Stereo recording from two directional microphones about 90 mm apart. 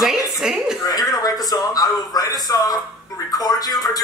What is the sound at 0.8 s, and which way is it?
A man's voice, 45° left (ahead or behind).